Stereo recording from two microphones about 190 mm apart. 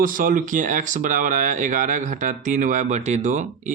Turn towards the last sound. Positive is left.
turn(degrees=-40)  # may be behind; listen again after turning